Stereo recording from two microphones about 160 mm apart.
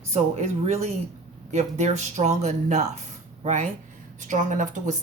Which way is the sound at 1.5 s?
45° right (ahead or behind).